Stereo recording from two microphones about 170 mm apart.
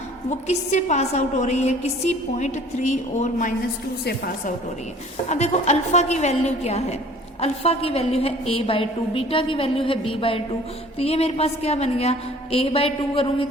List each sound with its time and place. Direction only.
0.3 s a woman's voice: 45° left (ahead or behind)
4.0 s a woman's voice: 65° left (ahead or behind)
5.3 s a woman's voice: 40° left (ahead or behind)